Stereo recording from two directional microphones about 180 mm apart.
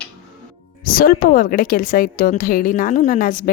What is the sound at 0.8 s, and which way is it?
A woman's voice, 55° left (ahead or behind).